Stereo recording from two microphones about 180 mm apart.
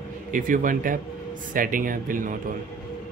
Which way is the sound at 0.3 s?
50° right (ahead or behind).